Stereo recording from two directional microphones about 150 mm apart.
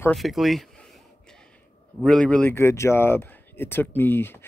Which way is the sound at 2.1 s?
5° left (ahead or behind).